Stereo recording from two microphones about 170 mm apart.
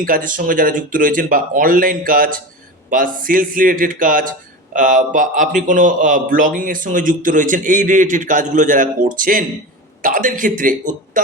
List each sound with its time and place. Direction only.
0.0 s a man's voice: 55° right (ahead or behind)